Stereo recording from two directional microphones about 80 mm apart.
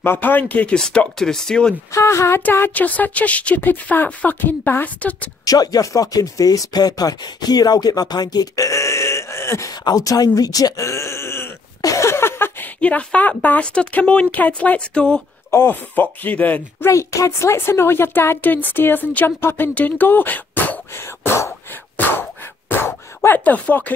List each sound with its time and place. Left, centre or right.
0.0 s speech: left; by 1.8 s centre
1.9 s speech: left
2.7 s a woman's voice: centre
5.4 s speech: left
9.7 s speech: left
11.8 s a sound: left
12.8 s speech: centre
15.5 s a woman's voice: left
16.8 s speech: left; by 23.9 s centre